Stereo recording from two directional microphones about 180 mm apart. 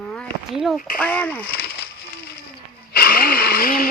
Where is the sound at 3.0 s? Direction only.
55° left (ahead or behind).